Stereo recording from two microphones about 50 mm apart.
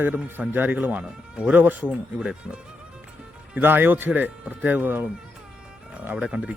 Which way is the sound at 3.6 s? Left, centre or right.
Right.